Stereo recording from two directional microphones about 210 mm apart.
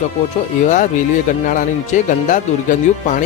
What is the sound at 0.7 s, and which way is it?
Speech, 35° left (ahead or behind).